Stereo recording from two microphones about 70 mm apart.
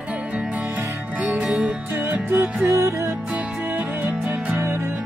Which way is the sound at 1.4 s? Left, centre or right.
Centre.